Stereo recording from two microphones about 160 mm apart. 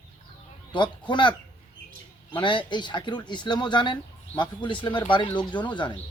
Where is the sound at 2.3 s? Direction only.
30° left (ahead or behind).